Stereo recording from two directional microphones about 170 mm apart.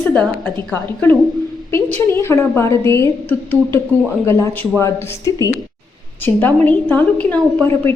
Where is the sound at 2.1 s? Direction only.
15° left (ahead or behind).